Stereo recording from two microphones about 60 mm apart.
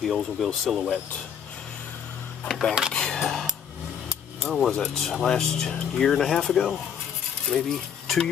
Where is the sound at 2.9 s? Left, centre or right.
Centre.